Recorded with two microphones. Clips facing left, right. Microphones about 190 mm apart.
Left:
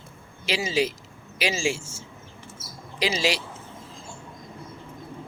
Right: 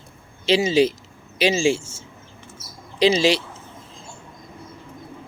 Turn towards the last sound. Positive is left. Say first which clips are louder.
# right 8 dB
turn(degrees=-25)  # may be behind; listen again after turning